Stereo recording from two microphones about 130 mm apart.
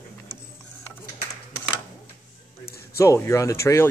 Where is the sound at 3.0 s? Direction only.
20° left (ahead or behind).